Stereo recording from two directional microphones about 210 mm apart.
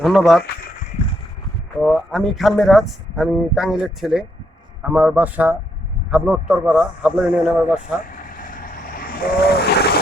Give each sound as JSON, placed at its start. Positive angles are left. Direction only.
{"t": 0.0, "sound": "speech", "side_deg": 0}
{"t": 1.0, "sound": "a sound", "side_deg": 30}
{"t": 1.8, "sound": "a man's voice", "side_deg": 5}
{"t": 8.1, "sound": "vehicle", "side_deg": 40}